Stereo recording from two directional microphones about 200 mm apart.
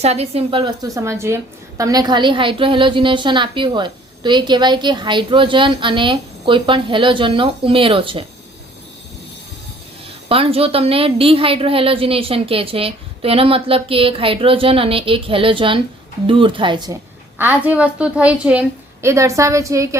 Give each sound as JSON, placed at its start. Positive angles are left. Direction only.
{"t": 0.0, "sound": "a woman's voice", "side_deg": -30}
{"t": 10.2, "sound": "a woman's voice", "side_deg": -30}
{"t": 17.3, "sound": "a woman's voice", "side_deg": -10}